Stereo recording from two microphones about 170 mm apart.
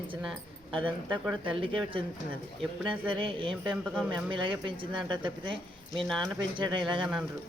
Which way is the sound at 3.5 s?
Centre (ahead or behind).